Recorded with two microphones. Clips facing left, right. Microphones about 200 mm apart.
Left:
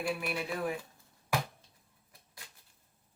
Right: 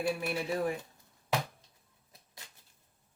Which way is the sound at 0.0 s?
25° right (ahead or behind).